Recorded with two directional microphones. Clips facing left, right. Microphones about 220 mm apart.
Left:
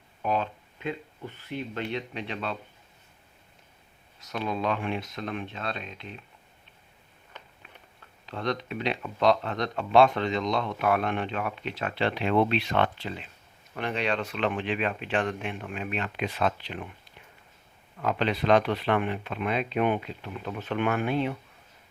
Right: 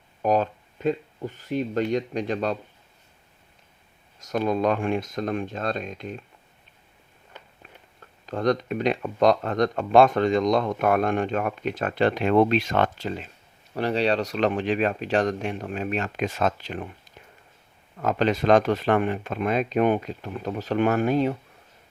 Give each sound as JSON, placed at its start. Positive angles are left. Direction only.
{"t": 0.2, "sound": "speech", "side_deg": -40}
{"t": 4.2, "sound": "speech", "side_deg": -45}
{"t": 8.3, "sound": "speech", "side_deg": -45}
{"t": 18.0, "sound": "speech", "side_deg": -45}